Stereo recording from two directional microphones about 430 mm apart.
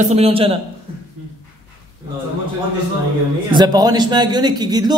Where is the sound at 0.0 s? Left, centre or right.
Centre.